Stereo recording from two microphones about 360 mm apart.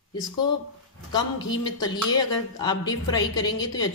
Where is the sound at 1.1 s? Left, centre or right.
Centre.